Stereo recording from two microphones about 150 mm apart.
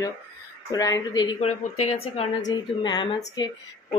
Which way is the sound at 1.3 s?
50° left (ahead or behind).